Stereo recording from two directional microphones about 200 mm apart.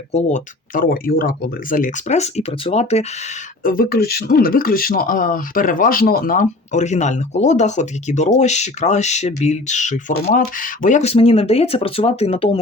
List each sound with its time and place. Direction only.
0.1 s speech: 35° left (ahead or behind)
3.6 s speech: 45° left (ahead or behind); by 12.5 s 30° left (ahead or behind)